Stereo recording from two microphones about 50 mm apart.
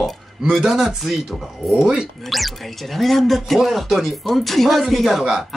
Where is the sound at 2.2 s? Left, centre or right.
Centre.